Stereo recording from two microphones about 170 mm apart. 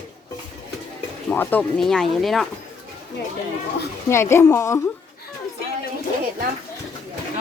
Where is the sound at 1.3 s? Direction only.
10° left (ahead or behind).